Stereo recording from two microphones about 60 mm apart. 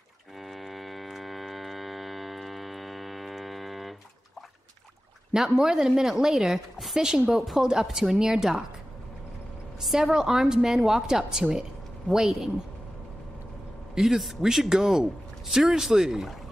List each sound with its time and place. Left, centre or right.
0.4 s a sound: centre
5.3 s a woman's voice: centre
9.8 s a woman's voice: centre
13.9 s a man's voice: centre